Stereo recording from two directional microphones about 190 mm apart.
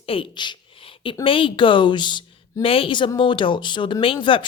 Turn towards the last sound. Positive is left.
turn(degrees=25)  # may be behind; listen again after turning